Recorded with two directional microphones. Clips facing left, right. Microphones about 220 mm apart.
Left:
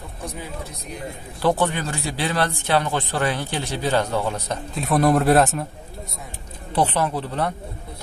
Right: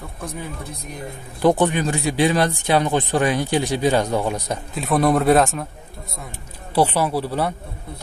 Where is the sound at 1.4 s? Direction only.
15° right (ahead or behind).